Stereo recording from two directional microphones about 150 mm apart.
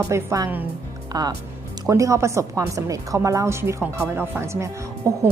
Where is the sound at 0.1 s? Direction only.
20° right (ahead or behind).